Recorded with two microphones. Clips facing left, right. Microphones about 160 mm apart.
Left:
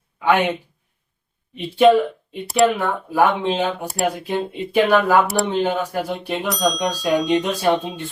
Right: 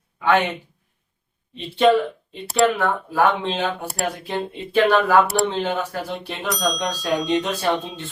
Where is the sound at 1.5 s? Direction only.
15° left (ahead or behind).